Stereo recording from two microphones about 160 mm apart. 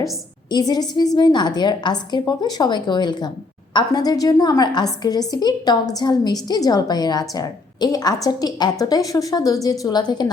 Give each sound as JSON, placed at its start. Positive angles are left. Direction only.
{"t": 0.5, "sound": "a woman's voice", "side_deg": 25}